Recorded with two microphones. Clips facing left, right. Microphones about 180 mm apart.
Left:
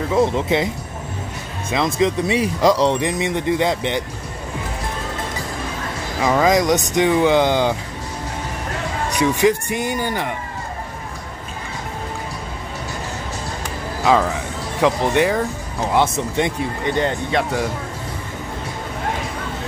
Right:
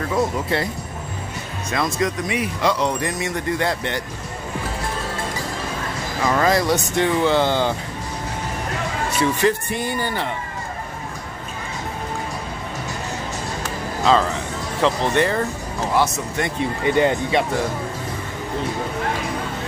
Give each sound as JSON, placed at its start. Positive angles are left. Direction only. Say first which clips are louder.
{"t": 0.1, "sound": "speech", "louder": "left 5 dB", "side_deg": 20}
{"t": 1.7, "sound": "speech", "louder": "left 4 dB", "side_deg": 20}
{"t": 2.9, "sound": "speech", "louder": "left 4 dB", "side_deg": 20}
{"t": 6.2, "sound": "speech", "louder": "left 3 dB", "side_deg": 15}
{"t": 9.1, "sound": "speech", "louder": "left 3 dB", "side_deg": 15}
{"t": 14.0, "sound": "speech", "louder": "left 1 dB", "side_deg": 10}
{"t": 16.8, "sound": "speech", "louder": "right 3 dB", "side_deg": -10}